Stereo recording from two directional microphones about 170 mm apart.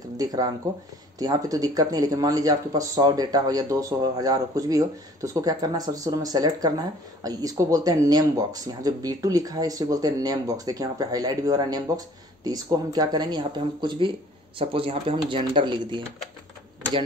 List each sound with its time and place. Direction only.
0.2 s speech: 20° right (ahead or behind)